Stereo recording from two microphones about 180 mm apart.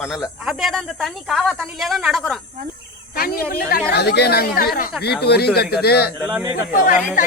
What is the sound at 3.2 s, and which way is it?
Speech, 55° left (ahead or behind).